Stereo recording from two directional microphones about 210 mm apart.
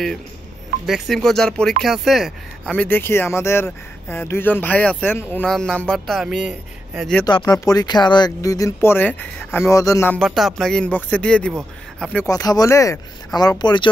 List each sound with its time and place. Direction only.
0.8 s speech: centre (ahead or behind)
7.2 s speech: 20° left (ahead or behind)
10.1 s speech: centre (ahead or behind)
12.3 s speech: 15° left (ahead or behind)